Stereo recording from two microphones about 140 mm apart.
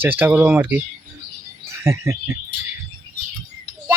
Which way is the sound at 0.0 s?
15° right (ahead or behind).